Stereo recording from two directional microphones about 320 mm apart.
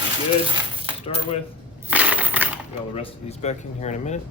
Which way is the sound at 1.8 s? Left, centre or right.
Centre.